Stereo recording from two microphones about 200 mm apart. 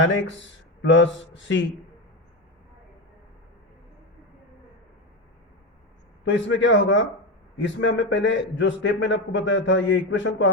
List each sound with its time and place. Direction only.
0.0 s a man's voice: 70° left (ahead or behind)
6.2 s a man's voice: 65° left (ahead or behind)